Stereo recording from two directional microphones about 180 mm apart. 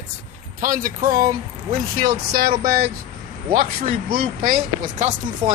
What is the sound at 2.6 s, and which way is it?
Speech, 55° right (ahead or behind).